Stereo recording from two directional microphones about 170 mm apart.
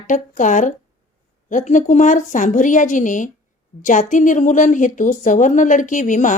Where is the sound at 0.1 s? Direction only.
50° left (ahead or behind).